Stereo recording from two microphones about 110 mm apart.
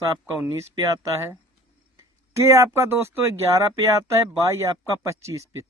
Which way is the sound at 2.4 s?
25° right (ahead or behind).